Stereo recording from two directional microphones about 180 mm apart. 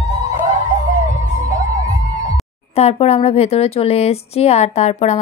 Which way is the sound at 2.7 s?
35° left (ahead or behind).